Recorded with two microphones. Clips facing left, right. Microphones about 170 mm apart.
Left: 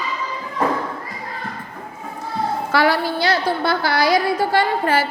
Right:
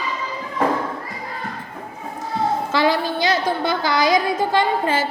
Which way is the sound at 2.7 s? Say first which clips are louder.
Left 4 dB; 20° right (ahead or behind).